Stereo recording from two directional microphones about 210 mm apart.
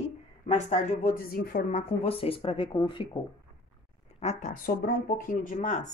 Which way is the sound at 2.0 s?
25° left (ahead or behind).